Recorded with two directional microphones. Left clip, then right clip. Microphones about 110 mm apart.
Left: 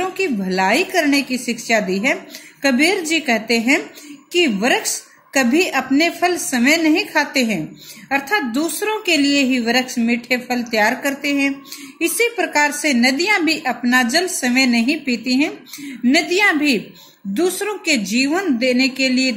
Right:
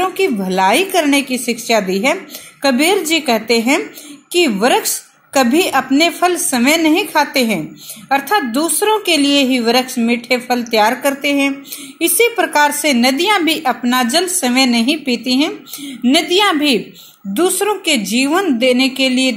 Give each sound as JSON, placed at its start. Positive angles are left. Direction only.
{"t": 0.0, "sound": "a woman's voice", "side_deg": -20}
{"t": 14.8, "sound": "speech", "side_deg": 40}
{"t": 16.1, "sound": "a woman's voice", "side_deg": -15}